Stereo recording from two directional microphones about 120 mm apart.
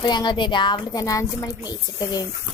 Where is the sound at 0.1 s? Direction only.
40° left (ahead or behind).